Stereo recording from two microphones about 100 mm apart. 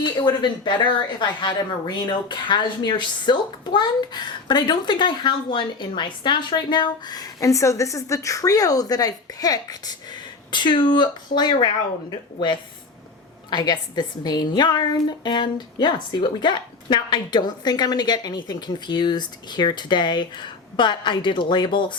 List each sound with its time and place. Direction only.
0.0 s a woman's voice: 50° left (ahead or behind)
10.5 s a woman's voice: 50° left (ahead or behind)
13.5 s a woman's voice: 45° left (ahead or behind)